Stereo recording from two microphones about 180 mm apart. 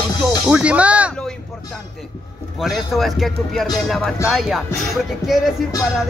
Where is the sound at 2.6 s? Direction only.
Centre (ahead or behind).